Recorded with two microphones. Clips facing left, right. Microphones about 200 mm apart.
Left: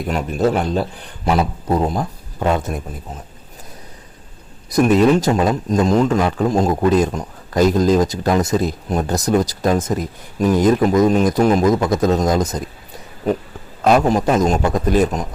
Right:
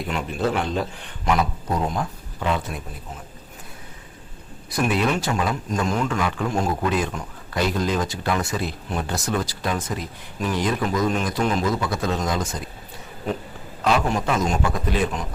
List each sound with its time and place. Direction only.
0.1 s a man's voice: 40° left (ahead or behind)
4.7 s a man's voice: 40° left (ahead or behind)
13.8 s a man's voice: 40° left (ahead or behind)